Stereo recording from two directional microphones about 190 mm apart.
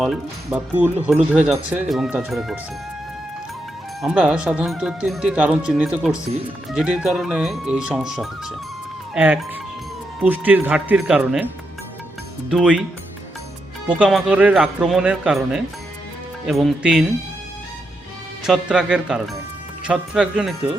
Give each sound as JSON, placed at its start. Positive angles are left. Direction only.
{"t": 0.0, "sound": "speech", "side_deg": -5}
{"t": 4.0, "sound": "speech", "side_deg": -5}
{"t": 12.5, "sound": "speech", "side_deg": -5}
{"t": 13.8, "sound": "speech", "side_deg": -5}
{"t": 18.4, "sound": "speech", "side_deg": -5}